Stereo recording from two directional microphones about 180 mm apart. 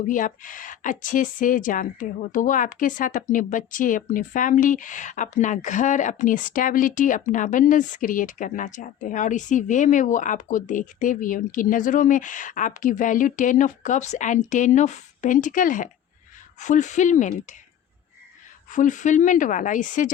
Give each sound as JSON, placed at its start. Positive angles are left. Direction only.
{"t": 0.1, "sound": "a woman's voice", "side_deg": 45}
{"t": 18.7, "sound": "a woman's voice", "side_deg": 45}